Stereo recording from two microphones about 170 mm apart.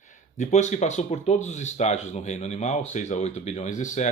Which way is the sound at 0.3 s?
40° left (ahead or behind).